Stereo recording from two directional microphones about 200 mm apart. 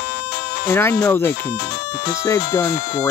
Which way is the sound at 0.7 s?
10° left (ahead or behind).